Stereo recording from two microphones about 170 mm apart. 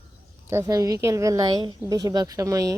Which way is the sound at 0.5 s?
20° right (ahead or behind).